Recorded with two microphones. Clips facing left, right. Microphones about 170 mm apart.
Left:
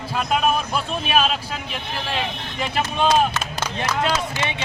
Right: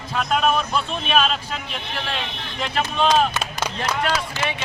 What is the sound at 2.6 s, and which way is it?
Speech, 10° left (ahead or behind).